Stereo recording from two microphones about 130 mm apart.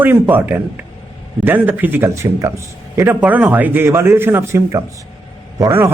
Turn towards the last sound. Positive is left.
turn(degrees=-20)  # may be behind; listen again after turning